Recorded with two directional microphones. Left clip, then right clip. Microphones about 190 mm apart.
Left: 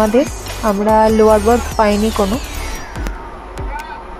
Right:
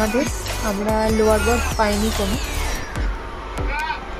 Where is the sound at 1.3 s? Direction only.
20° left (ahead or behind).